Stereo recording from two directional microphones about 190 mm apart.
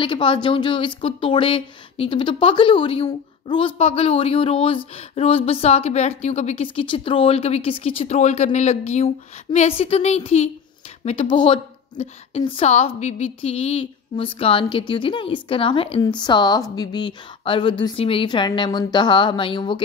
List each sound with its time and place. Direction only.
0.0 s a woman's voice: 25° left (ahead or behind)